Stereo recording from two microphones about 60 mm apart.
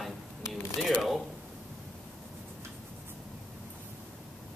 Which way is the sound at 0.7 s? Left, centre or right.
Centre.